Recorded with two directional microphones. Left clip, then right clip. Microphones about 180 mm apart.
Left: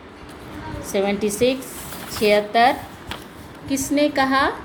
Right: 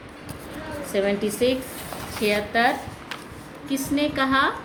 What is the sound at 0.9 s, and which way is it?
A woman's voice, 20° left (ahead or behind).